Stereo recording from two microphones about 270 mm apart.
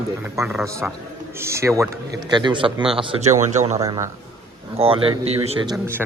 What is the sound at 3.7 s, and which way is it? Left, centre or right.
A man's voice, centre.